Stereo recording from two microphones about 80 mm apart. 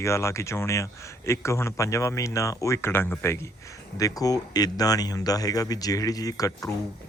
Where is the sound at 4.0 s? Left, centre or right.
Left.